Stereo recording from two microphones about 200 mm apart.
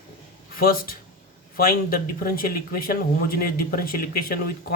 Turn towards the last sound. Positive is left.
turn(degrees=45)  # may be behind; listen again after turning